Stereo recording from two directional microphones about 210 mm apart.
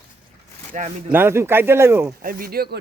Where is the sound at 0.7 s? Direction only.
35° right (ahead or behind).